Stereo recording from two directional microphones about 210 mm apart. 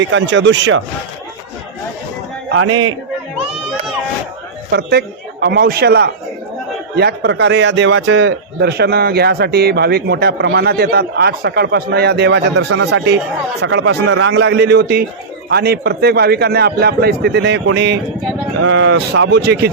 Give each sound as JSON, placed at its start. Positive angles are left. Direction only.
{"t": 0.0, "sound": "a man's voice", "side_deg": -60}
{"t": 2.6, "sound": "a man's voice", "side_deg": -70}
{"t": 4.7, "sound": "a man's voice", "side_deg": -50}
{"t": 18.6, "sound": "a man's voice", "side_deg": -65}